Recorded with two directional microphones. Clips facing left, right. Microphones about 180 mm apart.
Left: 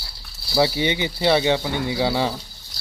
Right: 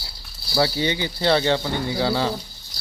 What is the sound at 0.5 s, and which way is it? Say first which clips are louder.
Speech: left 2 dB; 20° left (ahead or behind).